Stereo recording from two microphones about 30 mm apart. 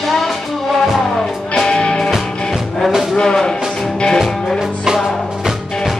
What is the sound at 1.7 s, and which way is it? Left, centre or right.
Music, left.